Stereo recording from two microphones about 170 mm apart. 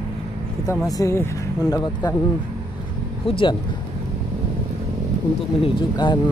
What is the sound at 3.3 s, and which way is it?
Speech, 30° left (ahead or behind).